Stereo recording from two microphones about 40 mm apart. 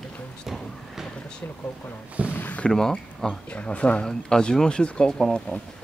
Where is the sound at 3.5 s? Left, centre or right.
Left.